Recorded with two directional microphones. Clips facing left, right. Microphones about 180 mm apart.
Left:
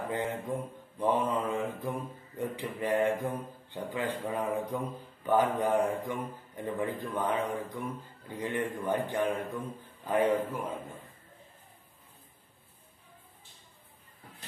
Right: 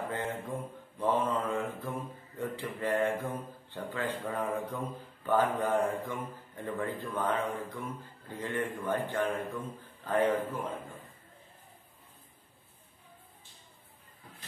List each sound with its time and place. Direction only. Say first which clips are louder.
0.1 s mantra: left 3 dB; 15° left (ahead or behind)